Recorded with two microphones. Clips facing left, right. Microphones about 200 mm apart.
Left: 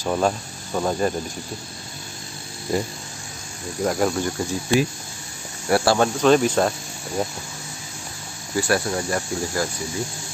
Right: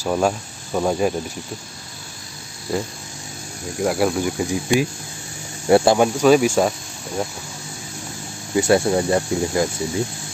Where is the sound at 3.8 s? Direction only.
5° right (ahead or behind).